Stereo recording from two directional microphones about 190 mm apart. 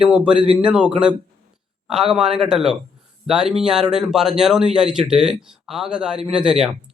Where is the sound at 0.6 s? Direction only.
5° right (ahead or behind).